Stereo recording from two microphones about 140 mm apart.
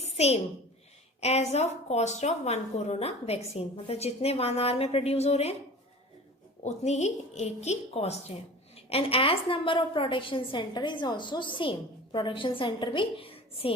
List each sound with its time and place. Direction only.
0.0 s a sound: 50° left (ahead or behind)
1.2 s a woman's voice: 50° left (ahead or behind)
6.6 s a woman's voice: 55° left (ahead or behind)